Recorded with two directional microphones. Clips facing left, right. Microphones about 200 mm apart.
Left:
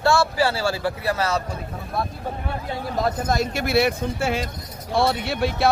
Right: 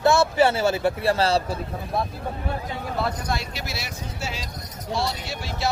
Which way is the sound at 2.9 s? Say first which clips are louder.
Left 5 dB; 40° left (ahead or behind).